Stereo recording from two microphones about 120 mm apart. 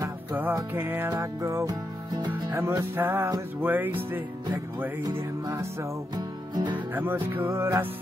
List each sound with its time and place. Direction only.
0.0 s music: 15° right (ahead or behind)
6.1 s music: 40° right (ahead or behind)
6.9 s music: 15° right (ahead or behind)